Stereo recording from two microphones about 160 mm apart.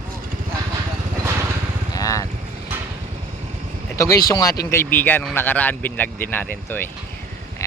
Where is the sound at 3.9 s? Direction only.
20° left (ahead or behind).